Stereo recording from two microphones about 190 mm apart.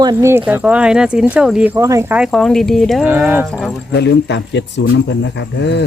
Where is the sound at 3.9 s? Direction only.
60° left (ahead or behind).